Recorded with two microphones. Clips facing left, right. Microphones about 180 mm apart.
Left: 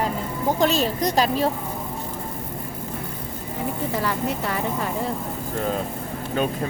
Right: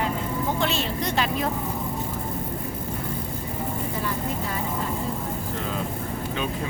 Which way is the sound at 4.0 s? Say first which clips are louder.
Left 4 dB; 85° left.